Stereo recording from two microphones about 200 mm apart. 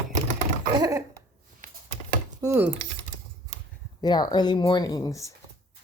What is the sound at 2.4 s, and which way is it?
Speech, 10° right (ahead or behind).